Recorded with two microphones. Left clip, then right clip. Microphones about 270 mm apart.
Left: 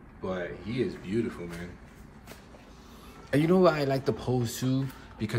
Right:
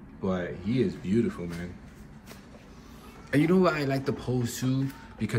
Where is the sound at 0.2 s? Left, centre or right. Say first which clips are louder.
Right 2 dB; centre.